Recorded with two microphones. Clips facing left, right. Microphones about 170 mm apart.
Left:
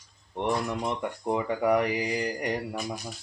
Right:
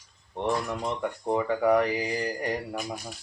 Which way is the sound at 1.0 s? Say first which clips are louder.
Right 1 dB; 15° left (ahead or behind).